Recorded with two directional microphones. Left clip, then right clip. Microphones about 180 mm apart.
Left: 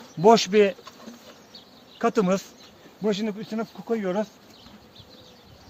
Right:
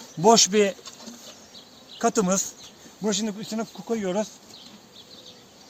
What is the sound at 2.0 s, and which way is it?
A man's voice, 25° left (ahead or behind).